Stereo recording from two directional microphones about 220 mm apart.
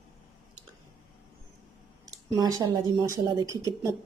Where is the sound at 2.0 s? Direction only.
15° right (ahead or behind).